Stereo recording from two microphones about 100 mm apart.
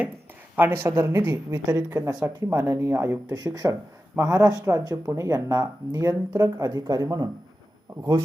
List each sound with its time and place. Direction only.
0.5 s speech: 20° right (ahead or behind)
3.2 s speech: 40° right (ahead or behind)